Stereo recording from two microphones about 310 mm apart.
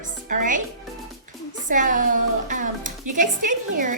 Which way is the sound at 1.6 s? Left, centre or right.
Right.